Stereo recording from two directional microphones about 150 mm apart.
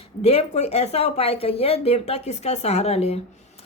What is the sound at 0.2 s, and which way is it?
A woman's voice, 45° left (ahead or behind).